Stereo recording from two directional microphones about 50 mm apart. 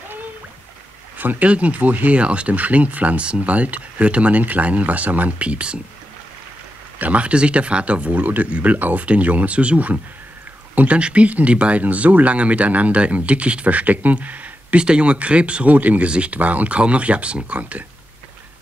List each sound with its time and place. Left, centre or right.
1.1 s speech: right
7.0 s speech: right